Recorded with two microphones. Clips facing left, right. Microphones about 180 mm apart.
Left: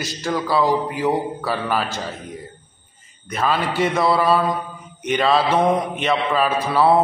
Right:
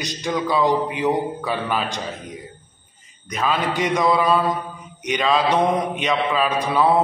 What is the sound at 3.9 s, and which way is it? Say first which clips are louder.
Speech: even; 5° left (ahead or behind).